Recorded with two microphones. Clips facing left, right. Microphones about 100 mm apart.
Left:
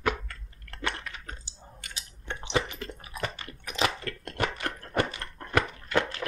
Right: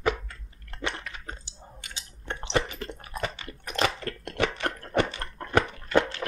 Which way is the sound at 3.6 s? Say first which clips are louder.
Right 1 dB; 5° left (ahead or behind).